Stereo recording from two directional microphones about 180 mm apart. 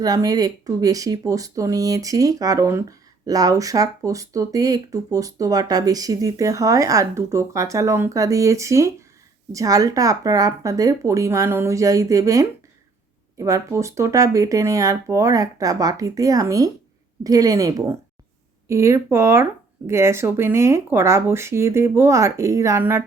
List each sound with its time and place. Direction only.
0.0 s speech: 20° right (ahead or behind)